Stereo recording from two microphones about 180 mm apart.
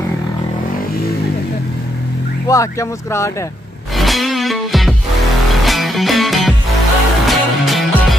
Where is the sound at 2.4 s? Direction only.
15° left (ahead or behind).